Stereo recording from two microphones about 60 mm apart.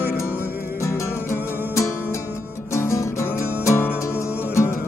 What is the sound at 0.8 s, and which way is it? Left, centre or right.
Music, left.